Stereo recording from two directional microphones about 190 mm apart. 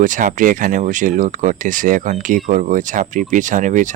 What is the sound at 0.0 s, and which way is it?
Speech, 45° right (ahead or behind).